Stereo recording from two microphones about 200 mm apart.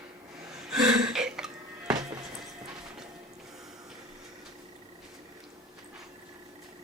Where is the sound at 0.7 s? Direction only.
Centre (ahead or behind).